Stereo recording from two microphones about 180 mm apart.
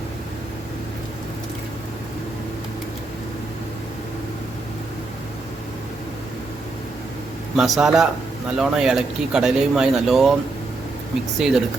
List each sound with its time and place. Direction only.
7.5 s speech: centre (ahead or behind)
11.3 s speech: centre (ahead or behind)